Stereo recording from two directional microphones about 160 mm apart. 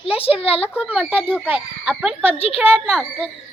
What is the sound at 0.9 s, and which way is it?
A child's voice, 10° right (ahead or behind).